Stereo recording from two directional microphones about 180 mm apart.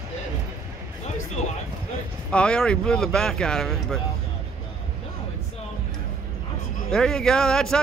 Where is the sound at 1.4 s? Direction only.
40° left (ahead or behind).